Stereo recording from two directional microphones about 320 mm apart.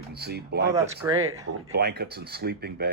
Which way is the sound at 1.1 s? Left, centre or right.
Right.